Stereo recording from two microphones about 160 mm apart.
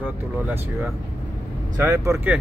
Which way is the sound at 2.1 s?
5° right (ahead or behind).